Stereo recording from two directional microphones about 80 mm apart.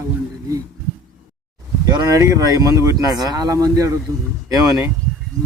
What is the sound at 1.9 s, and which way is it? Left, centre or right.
Speech, right.